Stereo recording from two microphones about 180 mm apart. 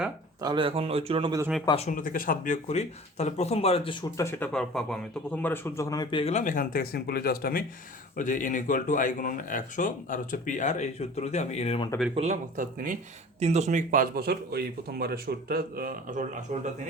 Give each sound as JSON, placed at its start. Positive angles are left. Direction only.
{"t": 0.4, "sound": "speech", "side_deg": -30}
{"t": 1.7, "sound": "speech", "side_deg": 40}
{"t": 4.2, "sound": "speech", "side_deg": 15}
{"t": 4.5, "sound": "speech", "side_deg": 5}
{"t": 6.3, "sound": "speech", "side_deg": 45}
{"t": 8.1, "sound": "speech", "side_deg": 45}
{"t": 12.1, "sound": "speech", "side_deg": -40}